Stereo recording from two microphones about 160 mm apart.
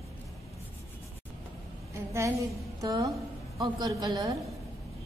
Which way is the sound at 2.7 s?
20° right (ahead or behind).